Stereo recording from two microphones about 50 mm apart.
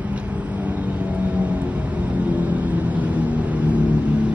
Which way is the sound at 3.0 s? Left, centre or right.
Right.